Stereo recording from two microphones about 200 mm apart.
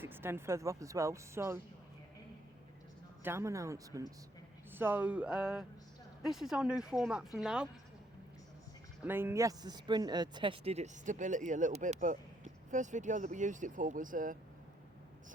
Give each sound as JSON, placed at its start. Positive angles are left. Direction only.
{"t": 0.0, "sound": "speech", "side_deg": -10}
{"t": 3.2, "sound": "speech", "side_deg": -15}
{"t": 9.0, "sound": "speech", "side_deg": -10}